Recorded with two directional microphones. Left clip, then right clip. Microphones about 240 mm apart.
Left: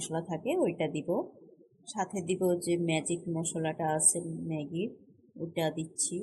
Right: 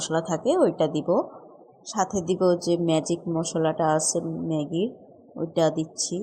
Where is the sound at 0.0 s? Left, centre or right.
Right.